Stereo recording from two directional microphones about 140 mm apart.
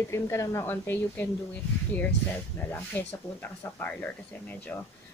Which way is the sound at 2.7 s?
15° left (ahead or behind).